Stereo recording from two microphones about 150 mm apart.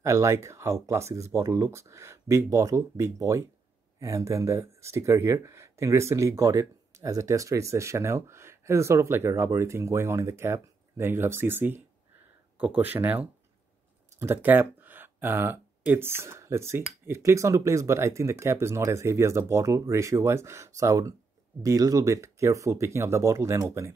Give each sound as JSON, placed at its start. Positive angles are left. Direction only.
{"t": 0.0, "sound": "speech", "side_deg": -20}